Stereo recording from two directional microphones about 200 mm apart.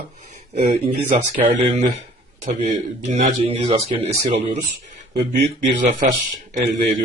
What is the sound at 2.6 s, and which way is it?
Speech, 35° right (ahead or behind).